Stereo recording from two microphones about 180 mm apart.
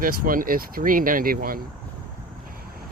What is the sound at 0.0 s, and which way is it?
Speech, 50° right (ahead or behind).